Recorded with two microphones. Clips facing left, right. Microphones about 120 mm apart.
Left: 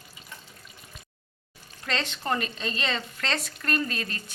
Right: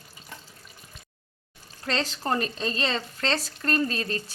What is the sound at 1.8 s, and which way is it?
Speech, 35° right (ahead or behind).